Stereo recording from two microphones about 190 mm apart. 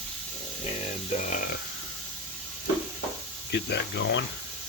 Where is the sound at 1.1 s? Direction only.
40° left (ahead or behind).